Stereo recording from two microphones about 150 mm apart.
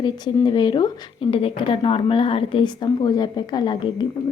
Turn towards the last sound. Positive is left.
turn(degrees=30)  # may be behind; listen again after turning